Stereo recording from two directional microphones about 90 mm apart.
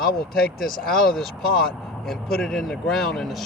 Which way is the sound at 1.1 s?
5° left (ahead or behind).